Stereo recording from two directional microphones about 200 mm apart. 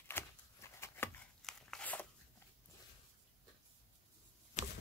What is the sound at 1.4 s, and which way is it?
Crunch, 5° left (ahead or behind).